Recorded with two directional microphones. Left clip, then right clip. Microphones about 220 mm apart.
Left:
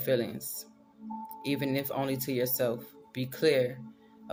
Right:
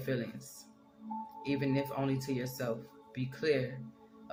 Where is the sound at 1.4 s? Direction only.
55° left (ahead or behind).